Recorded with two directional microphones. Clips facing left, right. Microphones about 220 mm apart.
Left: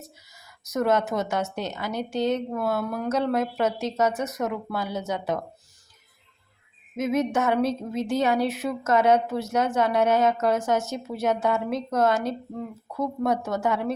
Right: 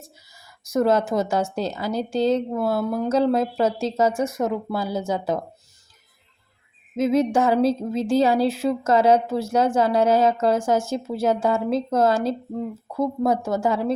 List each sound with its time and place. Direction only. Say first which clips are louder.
0.0 s speech: left 1 dB; 30° right (ahead or behind)
6.9 s speech: right 5 dB; 30° right (ahead or behind)